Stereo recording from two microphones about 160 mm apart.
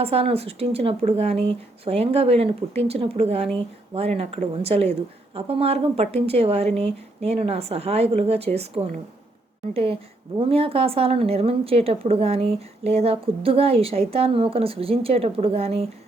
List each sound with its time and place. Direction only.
0.0 s a woman's voice: 40° right (ahead or behind)